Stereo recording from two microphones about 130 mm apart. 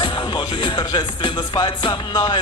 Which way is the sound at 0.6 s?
35° left (ahead or behind).